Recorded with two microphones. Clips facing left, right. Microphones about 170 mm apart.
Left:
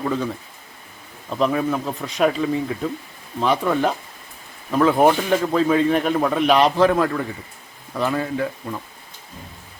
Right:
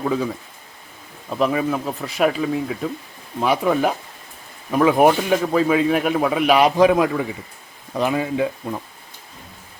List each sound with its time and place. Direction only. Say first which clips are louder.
0.0 s speech: right 2 dB; 5° right (ahead or behind)
1.3 s a man's voice: even; 5° right (ahead or behind)